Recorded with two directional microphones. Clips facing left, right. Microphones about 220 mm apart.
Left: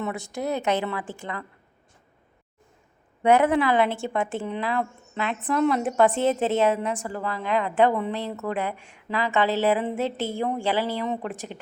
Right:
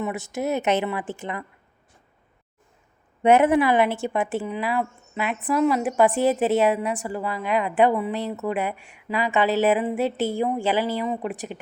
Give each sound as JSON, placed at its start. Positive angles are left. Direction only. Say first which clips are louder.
{"t": 0.0, "sound": "speech", "louder": "right 2 dB", "side_deg": -20}
{"t": 3.2, "sound": "a woman's voice", "louder": "right 2 dB", "side_deg": -20}